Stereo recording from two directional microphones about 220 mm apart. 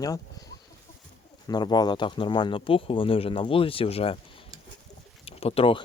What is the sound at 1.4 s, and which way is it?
Speech, 20° left (ahead or behind).